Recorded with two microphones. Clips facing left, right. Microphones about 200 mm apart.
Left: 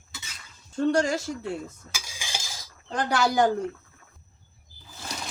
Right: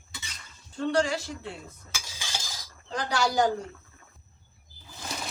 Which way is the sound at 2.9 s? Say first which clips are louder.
Left 3 dB; 55° left (ahead or behind).